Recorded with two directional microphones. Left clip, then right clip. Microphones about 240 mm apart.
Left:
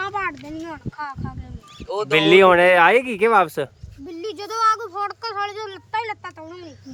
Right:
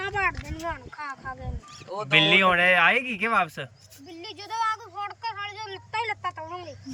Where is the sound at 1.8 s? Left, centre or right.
Left.